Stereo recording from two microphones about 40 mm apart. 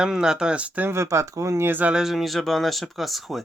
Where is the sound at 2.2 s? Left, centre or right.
Centre.